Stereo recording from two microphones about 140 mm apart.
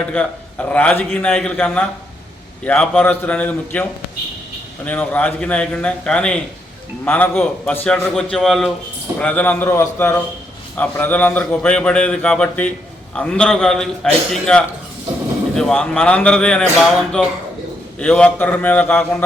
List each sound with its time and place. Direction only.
0.1 s a man's voice: 10° left (ahead or behind)
4.9 s a man's voice: 10° left (ahead or behind)